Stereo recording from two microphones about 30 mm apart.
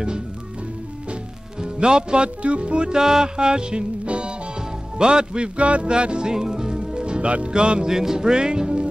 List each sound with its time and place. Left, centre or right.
1.6 s speech: right
2.9 s music: centre
3.3 s music: right
5.6 s music: right
5.9 s speech: right
6.3 s music: right
7.8 s music: centre